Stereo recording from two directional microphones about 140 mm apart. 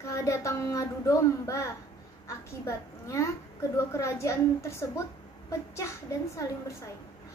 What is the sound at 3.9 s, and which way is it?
Speech, 20° left (ahead or behind).